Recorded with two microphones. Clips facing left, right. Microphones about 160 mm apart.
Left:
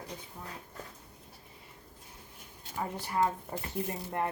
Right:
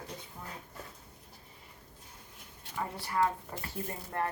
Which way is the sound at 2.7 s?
20° left (ahead or behind).